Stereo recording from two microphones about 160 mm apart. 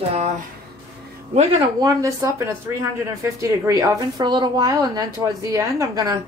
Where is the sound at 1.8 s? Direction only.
20° right (ahead or behind).